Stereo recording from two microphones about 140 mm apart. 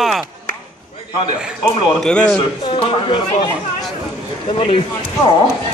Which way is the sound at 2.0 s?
5° left (ahead or behind).